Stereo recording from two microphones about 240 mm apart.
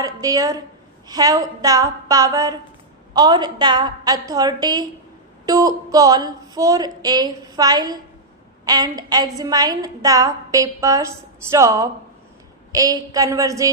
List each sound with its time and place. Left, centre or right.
0.0 s a woman's voice: centre